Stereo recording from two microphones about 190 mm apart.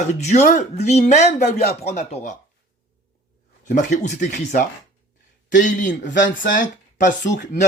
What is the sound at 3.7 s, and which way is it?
Speech, 40° left (ahead or behind).